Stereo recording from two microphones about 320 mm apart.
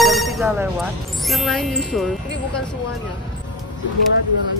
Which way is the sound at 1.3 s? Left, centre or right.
Centre.